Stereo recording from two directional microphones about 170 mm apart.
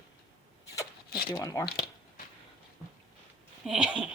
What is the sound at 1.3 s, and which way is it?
Speech, 20° left (ahead or behind).